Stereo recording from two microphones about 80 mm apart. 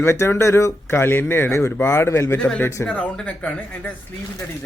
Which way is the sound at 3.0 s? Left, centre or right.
Centre.